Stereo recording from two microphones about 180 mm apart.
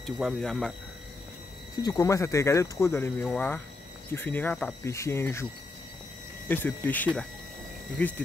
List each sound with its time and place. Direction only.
0.0 s speech: centre (ahead or behind)
1.8 s speech: 20° left (ahead or behind)
6.5 s speech: 10° left (ahead or behind)